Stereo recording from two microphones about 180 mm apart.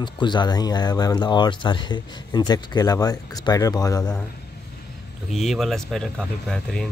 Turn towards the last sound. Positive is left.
turn(degrees=5)  # may be behind; listen again after turning